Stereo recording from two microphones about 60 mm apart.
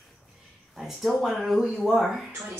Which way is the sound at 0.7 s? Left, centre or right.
Centre.